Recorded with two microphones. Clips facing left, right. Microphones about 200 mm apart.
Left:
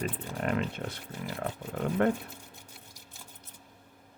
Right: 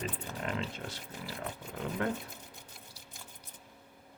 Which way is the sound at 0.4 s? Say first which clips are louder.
Left 7 dB; 60° left (ahead or behind).